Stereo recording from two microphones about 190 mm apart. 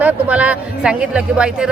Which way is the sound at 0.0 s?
5° right (ahead or behind).